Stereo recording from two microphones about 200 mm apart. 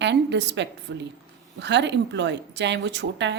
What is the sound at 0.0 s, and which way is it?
Speech, 60° right (ahead or behind).